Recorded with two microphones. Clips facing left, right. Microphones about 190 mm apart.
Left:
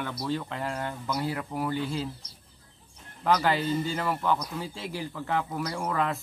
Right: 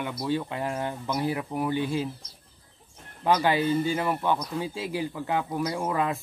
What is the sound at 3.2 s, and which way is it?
A man's voice, 15° right (ahead or behind).